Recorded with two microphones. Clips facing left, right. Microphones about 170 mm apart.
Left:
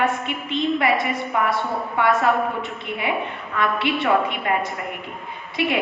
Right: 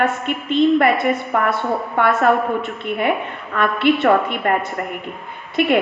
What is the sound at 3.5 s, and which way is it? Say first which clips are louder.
A woman's voice: right 6 dB; 55° right (ahead or behind).